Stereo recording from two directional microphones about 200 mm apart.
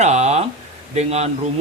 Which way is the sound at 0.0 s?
35° right (ahead or behind).